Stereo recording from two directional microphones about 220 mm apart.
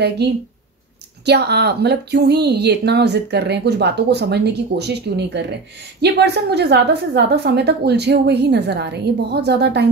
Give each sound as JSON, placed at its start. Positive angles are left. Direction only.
{"t": 1.2, "sound": "speech", "side_deg": -50}